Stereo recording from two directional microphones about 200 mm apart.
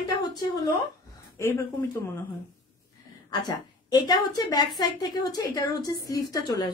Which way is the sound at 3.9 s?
20° left (ahead or behind).